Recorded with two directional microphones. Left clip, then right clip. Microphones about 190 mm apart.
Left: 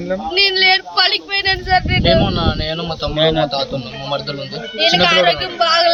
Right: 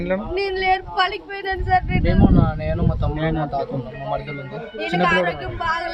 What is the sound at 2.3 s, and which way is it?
Speech, 10° right (ahead or behind).